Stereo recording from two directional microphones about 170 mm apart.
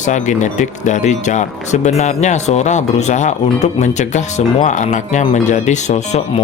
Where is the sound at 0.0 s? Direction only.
45° left (ahead or behind).